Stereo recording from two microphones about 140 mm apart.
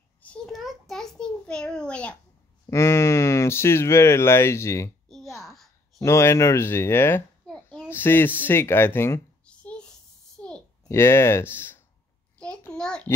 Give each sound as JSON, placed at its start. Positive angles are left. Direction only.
{"t": 0.2, "sound": "a child's voice", "side_deg": 5}
{"t": 2.6, "sound": "speech", "side_deg": 20}
{"t": 5.9, "sound": "speech", "side_deg": 20}
{"t": 7.4, "sound": "a sound", "side_deg": 5}
{"t": 7.9, "sound": "speech", "side_deg": 15}
{"t": 9.5, "sound": "a sound", "side_deg": 10}
{"t": 10.9, "sound": "a child's voice", "side_deg": 20}